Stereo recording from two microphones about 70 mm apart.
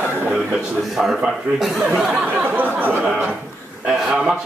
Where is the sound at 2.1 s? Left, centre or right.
Right.